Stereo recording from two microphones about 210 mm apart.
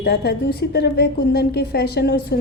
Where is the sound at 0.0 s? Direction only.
50° left (ahead or behind).